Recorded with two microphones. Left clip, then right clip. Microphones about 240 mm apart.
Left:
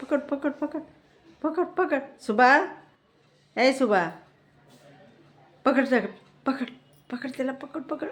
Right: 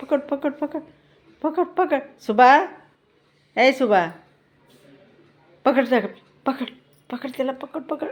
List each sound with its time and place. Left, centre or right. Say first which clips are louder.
0.1 s a woman's voice: right 4 dB; centre
5.6 s a woman's voice: right 4 dB; centre